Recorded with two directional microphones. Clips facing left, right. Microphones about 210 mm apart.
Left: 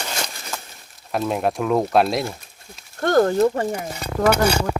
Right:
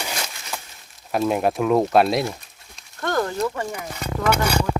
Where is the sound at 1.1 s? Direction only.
Centre (ahead or behind).